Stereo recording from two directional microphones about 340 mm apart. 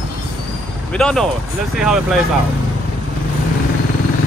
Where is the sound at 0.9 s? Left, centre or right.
Centre.